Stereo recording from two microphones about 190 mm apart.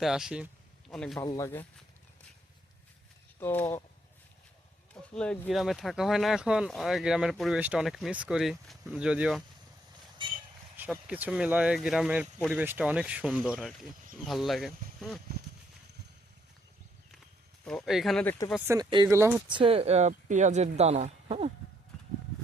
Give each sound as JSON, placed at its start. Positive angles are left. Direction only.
{"t": 0.0, "sound": "a sound", "side_deg": 0}
{"t": 0.9, "sound": "speech", "side_deg": 5}
{"t": 1.2, "sound": "speech", "side_deg": 20}
{"t": 3.4, "sound": "speech", "side_deg": 10}
{"t": 5.1, "sound": "speech", "side_deg": 5}
{"t": 10.2, "sound": "vehicle", "side_deg": -25}
{"t": 10.8, "sound": "speech", "side_deg": -10}
{"t": 17.7, "sound": "speech", "side_deg": 0}
{"t": 18.7, "sound": "speech", "side_deg": -20}
{"t": 19.5, "sound": "speech", "side_deg": -25}